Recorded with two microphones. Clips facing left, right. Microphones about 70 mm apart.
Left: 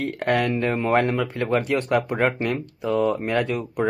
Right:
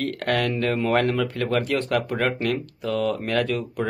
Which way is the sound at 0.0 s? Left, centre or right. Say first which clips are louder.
Left 2 dB; centre.